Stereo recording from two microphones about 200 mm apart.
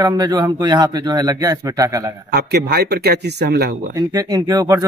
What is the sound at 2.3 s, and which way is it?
Speech, 55° right (ahead or behind).